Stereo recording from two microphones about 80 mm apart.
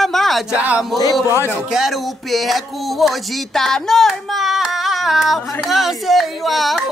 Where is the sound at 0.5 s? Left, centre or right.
Centre.